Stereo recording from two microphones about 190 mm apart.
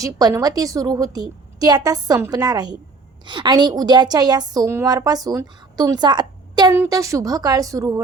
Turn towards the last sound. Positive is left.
turn(degrees=-15)  # may be behind; listen again after turning